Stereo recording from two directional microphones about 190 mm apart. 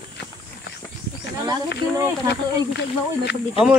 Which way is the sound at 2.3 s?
60° left (ahead or behind).